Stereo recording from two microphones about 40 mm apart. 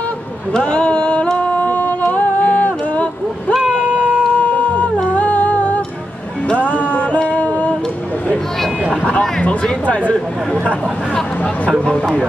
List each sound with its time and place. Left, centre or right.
0.5 s a sound: left
3.6 s boat: right
4.7 s humming: left
6.5 s music: left
7.2 s a sound: left
9.4 s speech: left